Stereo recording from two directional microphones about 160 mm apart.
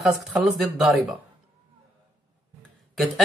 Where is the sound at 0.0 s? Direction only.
Centre (ahead or behind).